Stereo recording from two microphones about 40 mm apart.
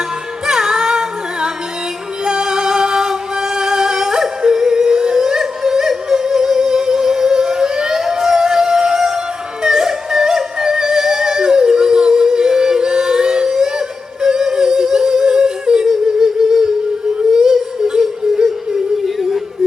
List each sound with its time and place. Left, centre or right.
0.4 s music: centre
19.0 s yodeling: centre